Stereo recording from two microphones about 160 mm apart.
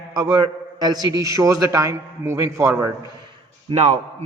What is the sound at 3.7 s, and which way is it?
Speech, 45° right (ahead or behind).